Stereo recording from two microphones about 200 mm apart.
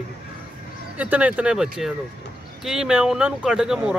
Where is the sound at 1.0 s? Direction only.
5° right (ahead or behind).